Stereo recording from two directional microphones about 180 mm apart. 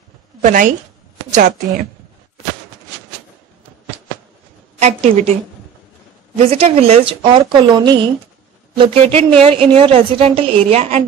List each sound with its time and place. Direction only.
0.4 s a woman's voice: 45° right (ahead or behind)
4.7 s a woman's voice: 35° right (ahead or behind)
6.3 s a woman's voice: 35° right (ahead or behind)